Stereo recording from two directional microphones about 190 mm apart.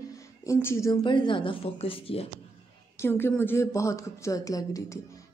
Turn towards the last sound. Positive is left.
turn(degrees=20)  # may be behind; listen again after turning